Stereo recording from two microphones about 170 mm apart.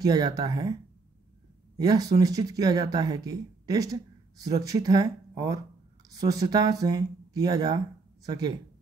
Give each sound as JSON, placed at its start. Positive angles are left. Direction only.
{"t": 0.0, "sound": "speech", "side_deg": -20}
{"t": 1.8, "sound": "speech", "side_deg": -20}